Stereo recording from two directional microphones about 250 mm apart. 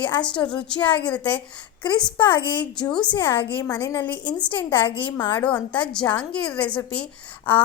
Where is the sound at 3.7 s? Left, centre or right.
Centre.